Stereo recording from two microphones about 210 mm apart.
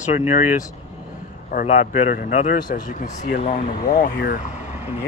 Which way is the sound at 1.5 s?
35° left (ahead or behind).